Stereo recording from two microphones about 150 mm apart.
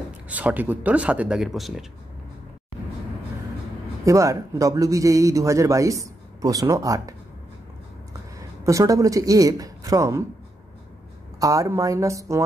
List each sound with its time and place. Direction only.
0.3 s speech: 10° right (ahead or behind)
4.0 s a man's voice: 20° right (ahead or behind)
8.4 s speech: 20° right (ahead or behind)
11.3 s a man's voice: 20° right (ahead or behind)